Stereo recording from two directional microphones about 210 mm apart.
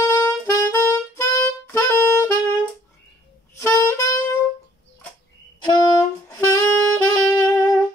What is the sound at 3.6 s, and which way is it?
Saxophone, 15° left (ahead or behind).